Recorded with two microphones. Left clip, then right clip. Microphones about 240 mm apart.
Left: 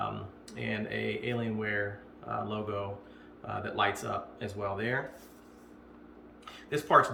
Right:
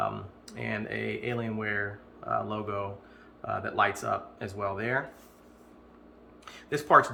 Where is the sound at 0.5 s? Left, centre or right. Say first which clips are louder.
Right 1 dB; centre.